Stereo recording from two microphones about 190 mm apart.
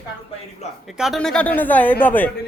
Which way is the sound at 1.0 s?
Centre (ahead or behind).